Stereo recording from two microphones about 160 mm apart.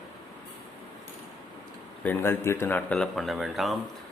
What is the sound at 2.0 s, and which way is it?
Speech, 15° left (ahead or behind).